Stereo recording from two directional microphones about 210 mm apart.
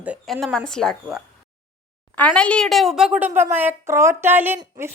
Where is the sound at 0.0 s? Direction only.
5° right (ahead or behind).